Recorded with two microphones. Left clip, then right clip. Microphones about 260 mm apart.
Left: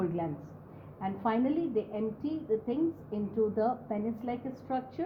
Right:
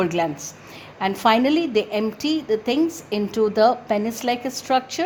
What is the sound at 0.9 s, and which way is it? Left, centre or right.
A woman's voice, right.